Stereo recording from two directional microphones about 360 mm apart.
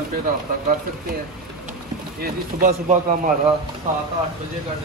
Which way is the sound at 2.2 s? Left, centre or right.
Right.